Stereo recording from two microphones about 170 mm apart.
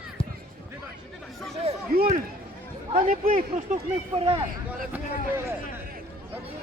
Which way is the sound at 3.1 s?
55° right (ahead or behind).